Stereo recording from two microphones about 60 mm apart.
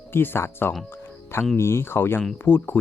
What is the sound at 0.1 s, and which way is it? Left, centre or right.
Speech, left.